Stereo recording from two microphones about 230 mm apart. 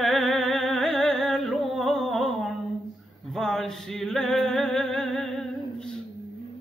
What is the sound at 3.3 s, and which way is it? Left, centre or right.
Singing, centre.